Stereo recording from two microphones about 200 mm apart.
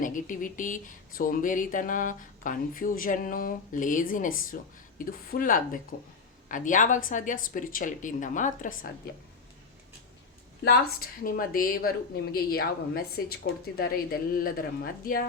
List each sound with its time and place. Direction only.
0.0 s speech: 40° left (ahead or behind)
10.6 s speech: 50° left (ahead or behind)